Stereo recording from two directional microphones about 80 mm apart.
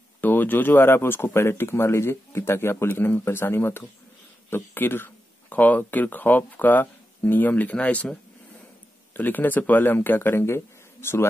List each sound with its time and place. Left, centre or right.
0.2 s speech: left